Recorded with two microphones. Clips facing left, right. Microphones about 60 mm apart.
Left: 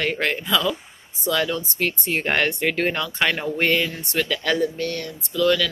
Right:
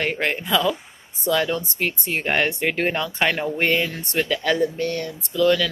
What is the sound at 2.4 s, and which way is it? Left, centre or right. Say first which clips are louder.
Speech: even; right.